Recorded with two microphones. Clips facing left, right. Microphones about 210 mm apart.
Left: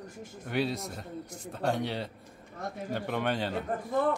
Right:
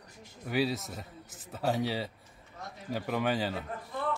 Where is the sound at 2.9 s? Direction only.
5° right (ahead or behind).